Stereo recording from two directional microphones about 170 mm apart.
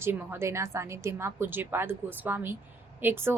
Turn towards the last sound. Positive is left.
turn(degrees=-10)  # may be behind; listen again after turning